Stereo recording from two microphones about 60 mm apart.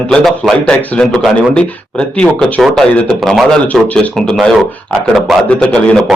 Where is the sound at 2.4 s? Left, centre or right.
Centre.